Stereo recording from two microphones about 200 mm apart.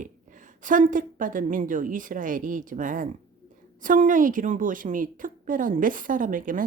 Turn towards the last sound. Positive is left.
turn(degrees=-40)  # may be behind; listen again after turning